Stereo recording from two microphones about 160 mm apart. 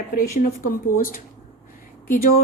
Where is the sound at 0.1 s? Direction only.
65° left (ahead or behind).